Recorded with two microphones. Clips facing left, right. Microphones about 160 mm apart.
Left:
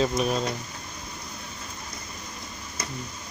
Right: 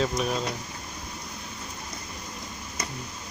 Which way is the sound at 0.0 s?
10° left (ahead or behind).